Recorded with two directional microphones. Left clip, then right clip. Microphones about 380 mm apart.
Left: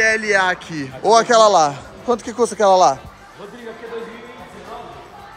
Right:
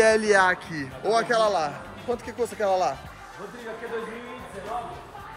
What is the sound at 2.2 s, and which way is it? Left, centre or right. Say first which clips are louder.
Speech: left 11 dB; left.